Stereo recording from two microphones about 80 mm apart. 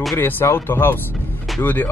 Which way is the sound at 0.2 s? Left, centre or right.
Left.